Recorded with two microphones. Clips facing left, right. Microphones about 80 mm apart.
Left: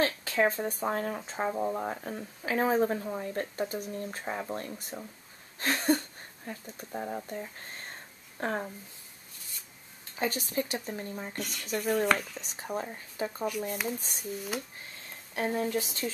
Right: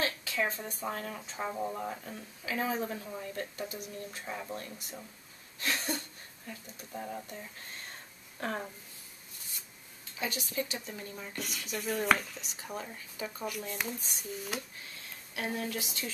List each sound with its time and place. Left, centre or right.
0.0 s speech: left
1.5 s speech: centre
1.8 s speech: left
10.1 s speech: left
11.3 s speech: centre
12.4 s speech: left
13.7 s speech: centre
15.3 s speech: left